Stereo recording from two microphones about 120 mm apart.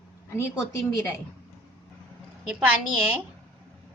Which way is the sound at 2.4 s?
10° right (ahead or behind).